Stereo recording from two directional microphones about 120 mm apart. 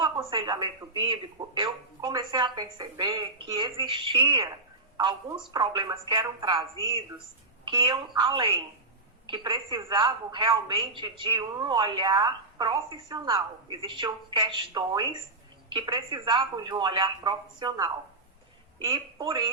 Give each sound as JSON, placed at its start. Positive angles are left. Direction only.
{"t": 0.0, "sound": "a woman's voice", "side_deg": -40}
{"t": 7.6, "sound": "a woman's voice", "side_deg": -40}